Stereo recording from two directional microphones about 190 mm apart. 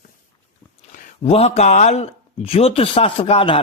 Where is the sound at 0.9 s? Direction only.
45° left (ahead or behind).